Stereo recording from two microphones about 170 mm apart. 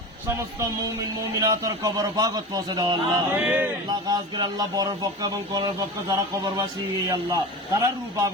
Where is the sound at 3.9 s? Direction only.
25° right (ahead or behind).